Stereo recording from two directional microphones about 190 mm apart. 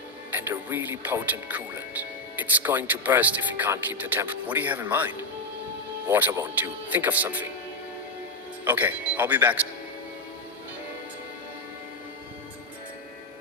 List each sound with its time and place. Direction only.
0.3 s speech: 10° right (ahead or behind)
8.6 s speech: 10° right (ahead or behind)